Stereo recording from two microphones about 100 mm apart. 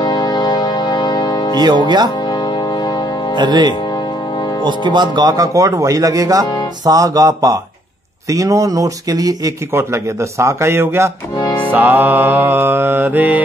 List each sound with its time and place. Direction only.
0.0 s music: 45° left (ahead or behind)
1.6 s speech: 45° right (ahead or behind)
3.3 s speech: 45° right (ahead or behind)
10.4 s mantra: 25° right (ahead or behind)